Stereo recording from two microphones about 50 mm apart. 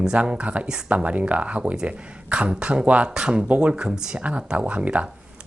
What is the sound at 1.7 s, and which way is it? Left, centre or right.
Speech, centre.